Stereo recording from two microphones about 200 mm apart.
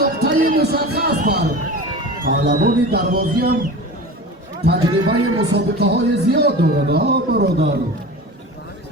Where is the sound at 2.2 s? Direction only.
45° right (ahead or behind).